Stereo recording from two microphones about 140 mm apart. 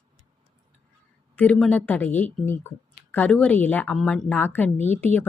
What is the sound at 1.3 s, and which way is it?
Speech, 10° left (ahead or behind).